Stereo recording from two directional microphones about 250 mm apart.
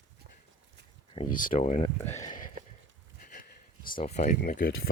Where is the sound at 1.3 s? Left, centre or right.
Left.